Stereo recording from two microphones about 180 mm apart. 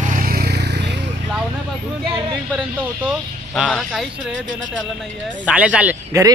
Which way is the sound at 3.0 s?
5° right (ahead or behind).